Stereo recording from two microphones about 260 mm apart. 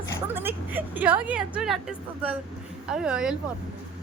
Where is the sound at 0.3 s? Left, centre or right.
Centre.